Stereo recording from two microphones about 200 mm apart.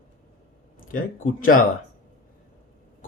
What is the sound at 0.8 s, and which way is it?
Speech, 45° left (ahead or behind).